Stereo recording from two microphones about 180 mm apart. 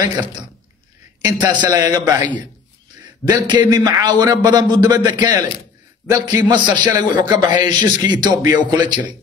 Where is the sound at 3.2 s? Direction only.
25° right (ahead or behind).